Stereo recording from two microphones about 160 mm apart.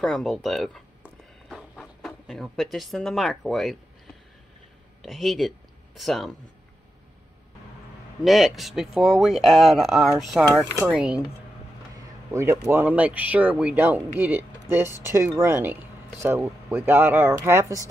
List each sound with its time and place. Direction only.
0.0 s a sound: centre (ahead or behind)
5.0 s speech: centre (ahead or behind)
8.2 s speech: centre (ahead or behind)
12.3 s speech: 15° right (ahead or behind)